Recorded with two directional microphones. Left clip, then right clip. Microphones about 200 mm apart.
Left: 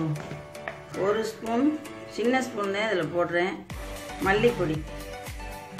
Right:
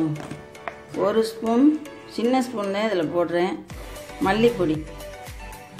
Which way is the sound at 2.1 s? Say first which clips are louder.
Right 3 dB; 30° right (ahead or behind).